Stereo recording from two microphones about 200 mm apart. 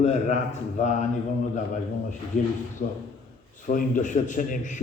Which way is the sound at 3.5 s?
40° left (ahead or behind).